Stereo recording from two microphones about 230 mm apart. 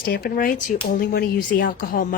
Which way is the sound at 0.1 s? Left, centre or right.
Left.